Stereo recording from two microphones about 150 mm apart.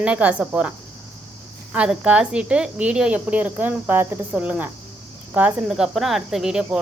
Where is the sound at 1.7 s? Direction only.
10° right (ahead or behind).